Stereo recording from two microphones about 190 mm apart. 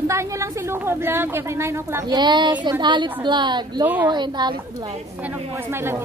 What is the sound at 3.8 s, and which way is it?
Speech, 10° right (ahead or behind).